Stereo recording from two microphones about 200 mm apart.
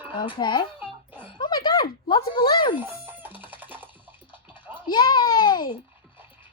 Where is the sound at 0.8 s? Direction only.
10° right (ahead or behind).